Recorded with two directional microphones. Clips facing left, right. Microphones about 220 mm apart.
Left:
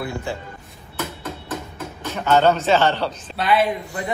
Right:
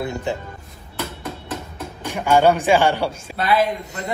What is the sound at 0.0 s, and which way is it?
Speech, 20° right (ahead or behind).